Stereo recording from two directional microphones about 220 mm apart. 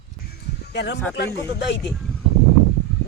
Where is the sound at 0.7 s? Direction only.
50° left (ahead or behind).